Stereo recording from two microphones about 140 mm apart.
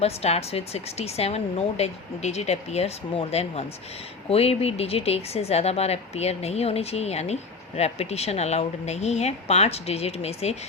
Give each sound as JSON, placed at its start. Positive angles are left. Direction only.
{"t": 0.0, "sound": "speech", "side_deg": 50}